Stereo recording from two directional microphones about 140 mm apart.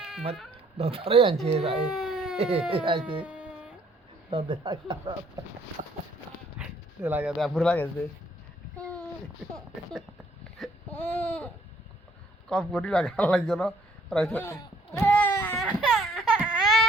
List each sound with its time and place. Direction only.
0.8 s speech: 40° right (ahead or behind)
1.9 s baby cry: 5° right (ahead or behind)
2.4 s speech: 45° right (ahead or behind)
3.2 s a sound: 5° right (ahead or behind)
4.3 s speech: 40° right (ahead or behind)
7.0 s speech: 15° right (ahead or behind)
7.3 s a man's voice: centre (ahead or behind)
9.4 s a man's voice: centre (ahead or behind)
10.6 s baby cry: 10° left (ahead or behind)
12.5 s a man's voice: 5° left (ahead or behind)
15.0 s baby cry: 10° left (ahead or behind)
15.5 s baby cry: centre (ahead or behind)